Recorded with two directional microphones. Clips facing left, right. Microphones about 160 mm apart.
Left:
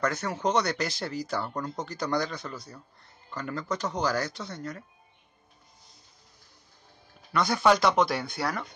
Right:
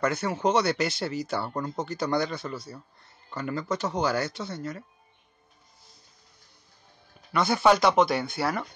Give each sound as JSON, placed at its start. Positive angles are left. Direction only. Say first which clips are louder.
{"t": 0.0, "sound": "speech", "louder": "right 3 dB", "side_deg": -5}
{"t": 7.3, "sound": "speech", "louder": "right 2 dB", "side_deg": -5}